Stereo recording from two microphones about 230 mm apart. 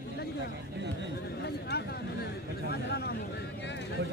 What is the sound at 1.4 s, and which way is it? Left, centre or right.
Speech, left.